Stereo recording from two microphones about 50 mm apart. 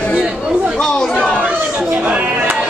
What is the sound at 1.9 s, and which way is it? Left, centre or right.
Music, right.